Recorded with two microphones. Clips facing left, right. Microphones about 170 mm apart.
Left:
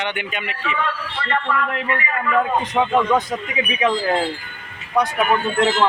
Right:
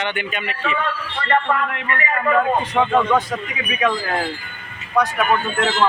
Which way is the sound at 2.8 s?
15° left (ahead or behind).